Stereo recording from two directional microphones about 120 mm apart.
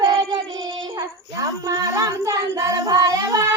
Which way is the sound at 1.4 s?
30° right (ahead or behind).